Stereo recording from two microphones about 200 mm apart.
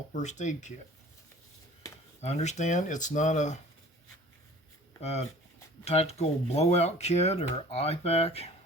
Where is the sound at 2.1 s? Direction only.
35° left (ahead or behind).